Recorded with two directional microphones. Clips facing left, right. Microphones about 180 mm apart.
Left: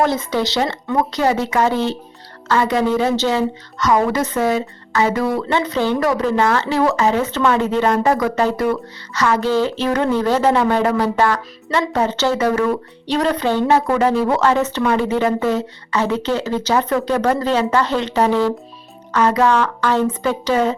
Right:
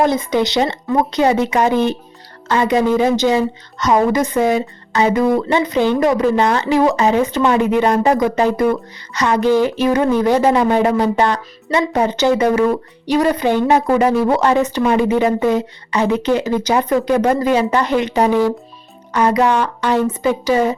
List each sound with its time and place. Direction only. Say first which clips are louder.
0.0 s a woman's voice: right 3 dB; 15° right (ahead or behind)